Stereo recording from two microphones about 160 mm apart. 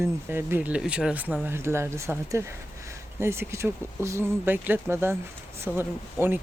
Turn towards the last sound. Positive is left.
turn(degrees=-15)  # may be behind; listen again after turning